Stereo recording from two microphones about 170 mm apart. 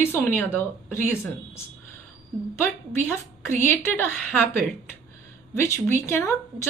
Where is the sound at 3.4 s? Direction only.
10° left (ahead or behind).